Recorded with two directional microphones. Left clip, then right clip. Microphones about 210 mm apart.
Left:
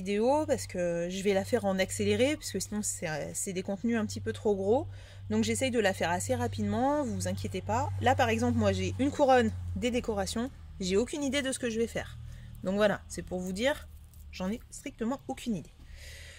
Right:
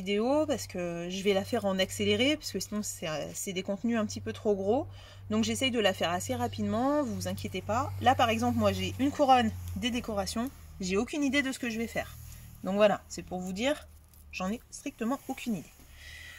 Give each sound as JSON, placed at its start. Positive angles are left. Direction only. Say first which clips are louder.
{"t": 0.0, "sound": "speech", "louder": "even", "side_deg": 55}